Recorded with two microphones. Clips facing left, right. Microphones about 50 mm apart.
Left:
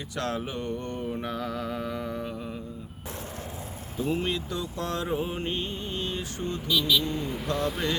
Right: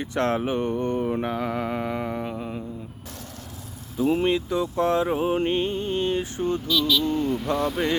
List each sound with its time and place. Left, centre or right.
0.0 s mantra: right
4.2 s mantra: right
5.0 s speech: right
6.7 s speech: centre